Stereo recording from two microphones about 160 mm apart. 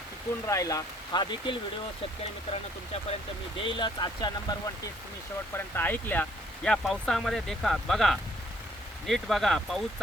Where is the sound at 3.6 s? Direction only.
30° left (ahead or behind).